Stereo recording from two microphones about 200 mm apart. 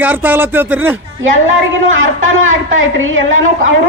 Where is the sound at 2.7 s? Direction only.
80° right.